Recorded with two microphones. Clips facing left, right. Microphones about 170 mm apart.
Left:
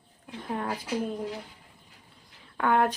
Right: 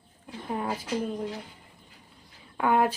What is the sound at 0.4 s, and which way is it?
Speech, 5° right (ahead or behind).